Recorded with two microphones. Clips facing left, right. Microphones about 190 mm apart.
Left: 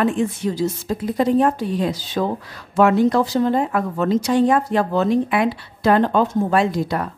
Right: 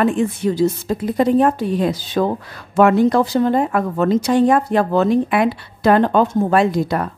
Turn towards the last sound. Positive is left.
turn(degrees=-55)  # may be behind; listen again after turning